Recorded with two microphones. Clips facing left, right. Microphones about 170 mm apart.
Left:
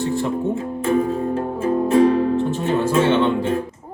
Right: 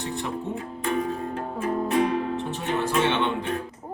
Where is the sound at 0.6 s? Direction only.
35° left (ahead or behind).